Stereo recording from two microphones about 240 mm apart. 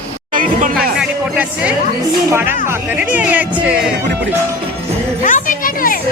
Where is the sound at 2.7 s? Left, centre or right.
Centre.